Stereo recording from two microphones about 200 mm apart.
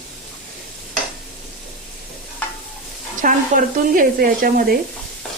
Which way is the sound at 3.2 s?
40° right (ahead or behind).